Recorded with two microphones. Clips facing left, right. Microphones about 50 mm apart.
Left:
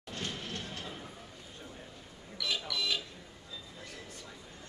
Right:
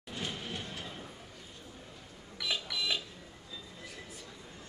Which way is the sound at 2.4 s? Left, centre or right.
Centre.